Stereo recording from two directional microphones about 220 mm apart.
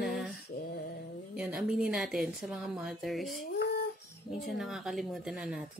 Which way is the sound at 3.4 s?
45° left (ahead or behind).